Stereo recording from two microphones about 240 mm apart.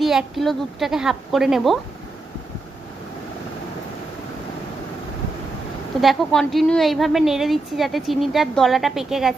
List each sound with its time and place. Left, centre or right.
0.0 s a woman's voice: centre
6.0 s a woman's voice: centre